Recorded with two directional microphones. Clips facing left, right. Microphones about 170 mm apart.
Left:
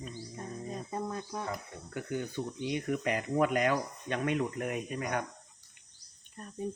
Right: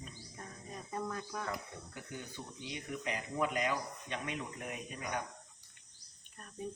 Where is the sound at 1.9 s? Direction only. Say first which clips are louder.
Left 13 dB; 60° left (ahead or behind).